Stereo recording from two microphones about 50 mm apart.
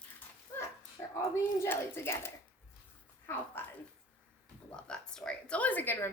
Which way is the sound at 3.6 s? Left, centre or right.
Left.